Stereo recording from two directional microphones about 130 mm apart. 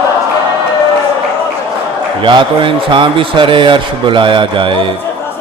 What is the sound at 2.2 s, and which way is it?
A man's voice, 40° right (ahead or behind).